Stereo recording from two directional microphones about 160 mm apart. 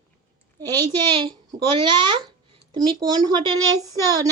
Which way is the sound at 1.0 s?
30° right (ahead or behind).